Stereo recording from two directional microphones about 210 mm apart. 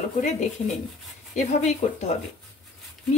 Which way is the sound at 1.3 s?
35° left (ahead or behind).